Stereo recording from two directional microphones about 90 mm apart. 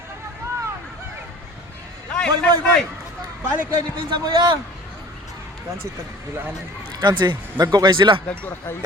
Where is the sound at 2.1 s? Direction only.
10° left (ahead or behind).